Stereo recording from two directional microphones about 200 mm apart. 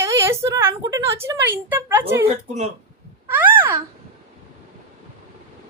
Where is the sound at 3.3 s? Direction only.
10° right (ahead or behind).